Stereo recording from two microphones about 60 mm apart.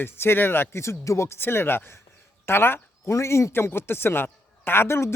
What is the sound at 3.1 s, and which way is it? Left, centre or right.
A man's voice, left.